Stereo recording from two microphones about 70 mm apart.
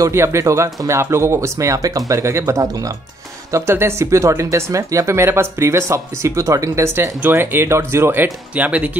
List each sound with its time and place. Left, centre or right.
0.0 s speech: right